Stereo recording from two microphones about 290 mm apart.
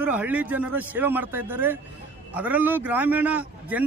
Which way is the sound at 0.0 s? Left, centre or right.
Centre.